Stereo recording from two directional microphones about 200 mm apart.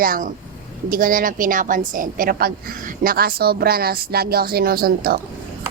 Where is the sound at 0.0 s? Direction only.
45° right (ahead or behind).